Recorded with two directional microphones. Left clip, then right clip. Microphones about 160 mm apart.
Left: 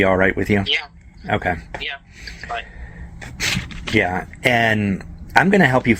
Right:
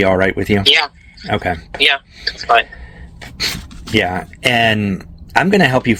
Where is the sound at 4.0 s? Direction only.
25° right (ahead or behind).